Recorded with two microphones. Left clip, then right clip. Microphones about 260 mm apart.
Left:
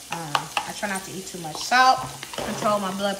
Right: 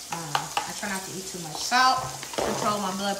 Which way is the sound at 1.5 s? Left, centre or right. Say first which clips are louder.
Left 4 dB; centre.